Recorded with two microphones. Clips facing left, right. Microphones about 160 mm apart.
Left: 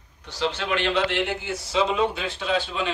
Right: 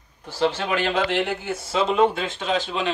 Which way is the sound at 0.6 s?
45° right (ahead or behind).